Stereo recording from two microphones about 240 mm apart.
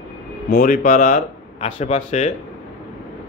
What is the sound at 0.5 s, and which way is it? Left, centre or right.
Speech, left.